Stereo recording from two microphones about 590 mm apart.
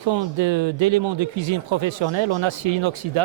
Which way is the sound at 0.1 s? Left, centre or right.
Right.